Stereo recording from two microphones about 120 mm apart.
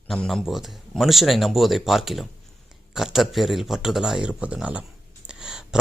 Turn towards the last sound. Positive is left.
turn(degrees=-5)  # may be behind; listen again after turning